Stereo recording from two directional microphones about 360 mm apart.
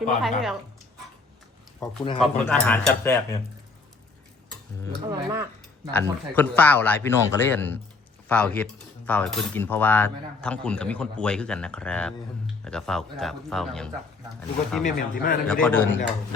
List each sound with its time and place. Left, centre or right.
0.2 s cutlery: centre
1.8 s cutlery: centre
5.0 s speech: centre
5.9 s cutlery: centre
15.2 s a man's voice: left
15.6 s cutlery: centre